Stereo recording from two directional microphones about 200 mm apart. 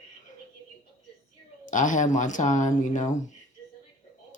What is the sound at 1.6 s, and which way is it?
Speech, 40° left (ahead or behind).